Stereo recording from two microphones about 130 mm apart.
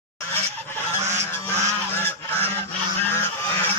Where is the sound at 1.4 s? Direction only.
15° left (ahead or behind).